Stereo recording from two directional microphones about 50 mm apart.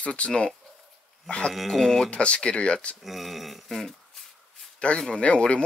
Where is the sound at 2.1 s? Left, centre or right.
Left.